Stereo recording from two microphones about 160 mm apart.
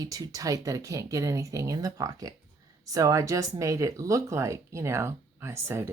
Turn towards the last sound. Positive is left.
turn(degrees=-15)  # may be behind; listen again after turning